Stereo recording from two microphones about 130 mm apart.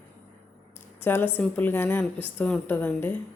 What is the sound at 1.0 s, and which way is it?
A woman's voice, 15° left (ahead or behind).